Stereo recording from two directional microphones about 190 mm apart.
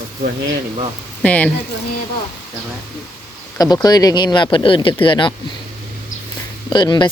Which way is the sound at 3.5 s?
20° left (ahead or behind).